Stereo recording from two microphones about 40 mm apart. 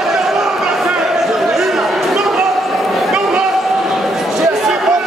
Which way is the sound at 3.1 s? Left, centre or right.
Centre.